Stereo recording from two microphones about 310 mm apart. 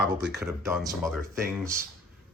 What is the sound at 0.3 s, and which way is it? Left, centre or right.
Speech, centre.